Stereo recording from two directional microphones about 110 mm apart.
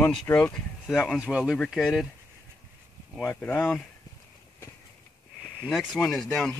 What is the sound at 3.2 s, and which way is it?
Speech, 15° left (ahead or behind).